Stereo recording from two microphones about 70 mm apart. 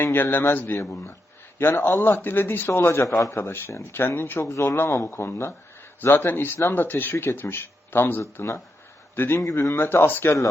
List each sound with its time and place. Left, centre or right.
0.0 s a man's voice: left
9.4 s speech: left
9.7 s a man's voice: left